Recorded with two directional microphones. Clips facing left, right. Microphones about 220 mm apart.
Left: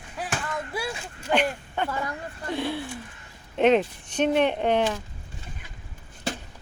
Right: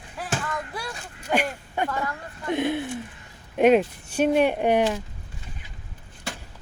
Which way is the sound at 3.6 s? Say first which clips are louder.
Right 2 dB; 10° right (ahead or behind).